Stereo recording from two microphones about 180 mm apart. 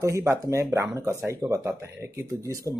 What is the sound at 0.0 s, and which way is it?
Speech, 15° right (ahead or behind).